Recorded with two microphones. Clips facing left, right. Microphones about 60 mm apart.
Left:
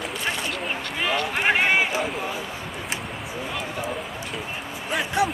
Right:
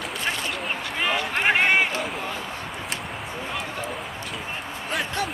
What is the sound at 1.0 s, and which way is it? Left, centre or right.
Run, centre.